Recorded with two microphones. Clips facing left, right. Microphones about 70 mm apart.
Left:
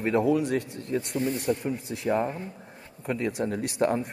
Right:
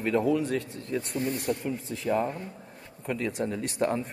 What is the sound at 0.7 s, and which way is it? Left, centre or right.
A man's voice, left.